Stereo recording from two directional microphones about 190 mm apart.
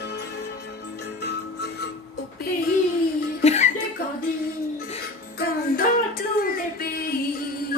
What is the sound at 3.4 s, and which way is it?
Music, 35° left (ahead or behind).